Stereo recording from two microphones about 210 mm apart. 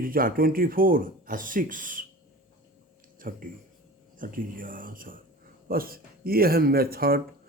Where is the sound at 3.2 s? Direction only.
40° right (ahead or behind).